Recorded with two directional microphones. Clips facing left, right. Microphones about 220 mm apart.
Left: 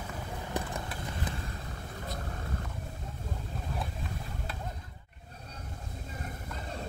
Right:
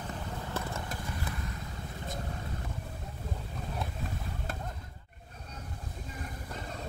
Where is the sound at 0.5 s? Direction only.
15° left (ahead or behind).